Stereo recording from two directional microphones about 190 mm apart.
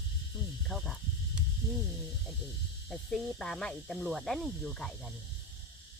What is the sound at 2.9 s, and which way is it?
Speech, centre (ahead or behind).